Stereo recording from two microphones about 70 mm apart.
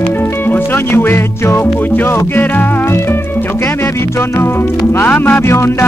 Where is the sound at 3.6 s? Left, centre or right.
Left.